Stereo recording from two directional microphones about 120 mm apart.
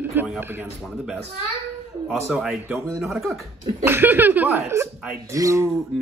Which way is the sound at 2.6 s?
20° right (ahead or behind).